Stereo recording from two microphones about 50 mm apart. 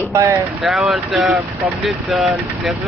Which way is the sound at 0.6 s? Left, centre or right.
Centre.